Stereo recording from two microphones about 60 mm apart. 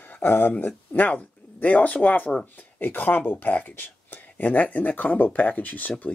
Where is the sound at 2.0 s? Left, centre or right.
Left.